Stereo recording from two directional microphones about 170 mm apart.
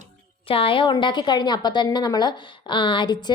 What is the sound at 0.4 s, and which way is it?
A woman's voice, 30° left (ahead or behind).